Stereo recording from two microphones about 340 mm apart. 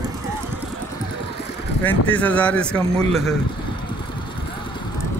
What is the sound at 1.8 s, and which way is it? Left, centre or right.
Speech, centre.